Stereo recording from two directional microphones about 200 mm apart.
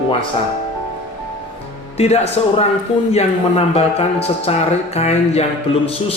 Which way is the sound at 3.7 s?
30° left (ahead or behind).